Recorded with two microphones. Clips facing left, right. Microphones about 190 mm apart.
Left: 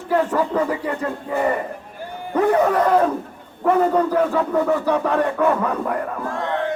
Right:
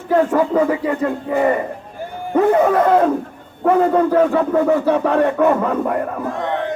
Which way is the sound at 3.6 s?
15° right (ahead or behind).